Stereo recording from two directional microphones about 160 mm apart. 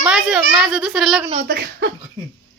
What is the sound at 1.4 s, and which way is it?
Speech, 65° right (ahead or behind).